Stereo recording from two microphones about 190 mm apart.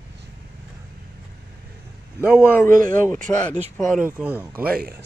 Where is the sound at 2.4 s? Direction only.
10° left (ahead or behind).